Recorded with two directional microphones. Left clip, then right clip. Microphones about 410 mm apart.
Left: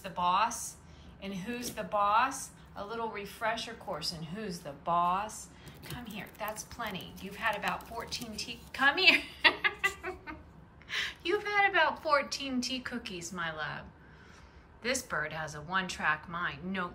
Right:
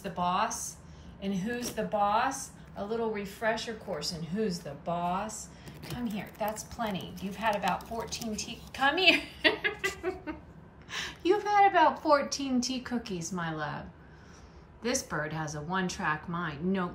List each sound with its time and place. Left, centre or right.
0.0 s a woman's voice: centre